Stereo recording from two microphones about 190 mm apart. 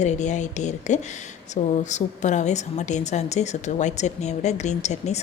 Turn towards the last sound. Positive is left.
turn(degrees=35)  # may be behind; listen again after turning